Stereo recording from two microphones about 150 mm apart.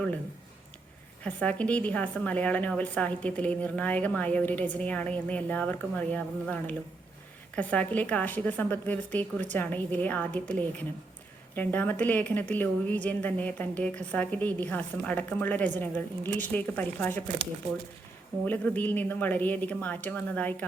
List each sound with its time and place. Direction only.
1.2 s speech: 10° left (ahead or behind)
18.4 s speech: 10° left (ahead or behind)